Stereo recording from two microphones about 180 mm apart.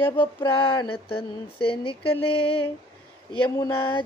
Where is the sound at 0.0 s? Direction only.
10° left (ahead or behind).